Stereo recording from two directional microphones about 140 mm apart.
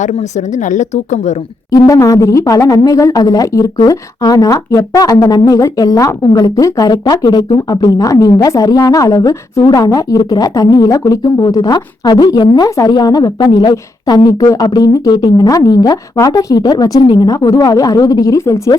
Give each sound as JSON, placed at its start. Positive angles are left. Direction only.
{"t": 0.0, "sound": "a woman's voice", "side_deg": 55}
{"t": 1.7, "sound": "a woman's voice", "side_deg": 25}